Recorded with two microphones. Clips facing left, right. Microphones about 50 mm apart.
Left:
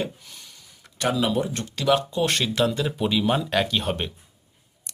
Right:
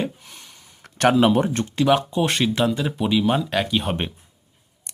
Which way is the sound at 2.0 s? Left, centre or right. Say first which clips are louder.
Right 3 dB; centre.